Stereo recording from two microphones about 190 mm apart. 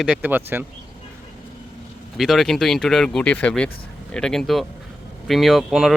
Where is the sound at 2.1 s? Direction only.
Centre (ahead or behind).